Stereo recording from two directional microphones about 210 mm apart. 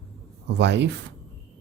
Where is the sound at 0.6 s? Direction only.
55° right (ahead or behind).